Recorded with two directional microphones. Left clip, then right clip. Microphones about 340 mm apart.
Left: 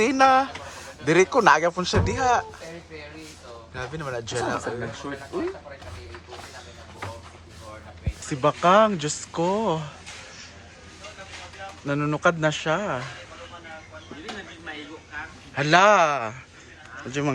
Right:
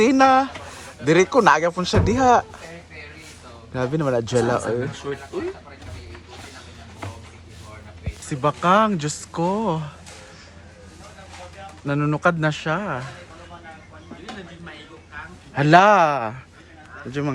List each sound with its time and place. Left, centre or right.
0.0 s speech: centre
3.8 s speech: centre
5.1 s speech: centre
8.3 s speech: centre
11.9 s speech: centre
15.5 s speech: centre